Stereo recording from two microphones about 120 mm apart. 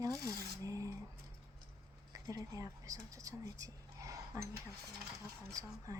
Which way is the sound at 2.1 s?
30° right (ahead or behind).